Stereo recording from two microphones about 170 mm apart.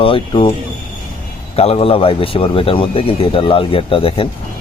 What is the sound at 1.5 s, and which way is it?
Speech, 35° left (ahead or behind).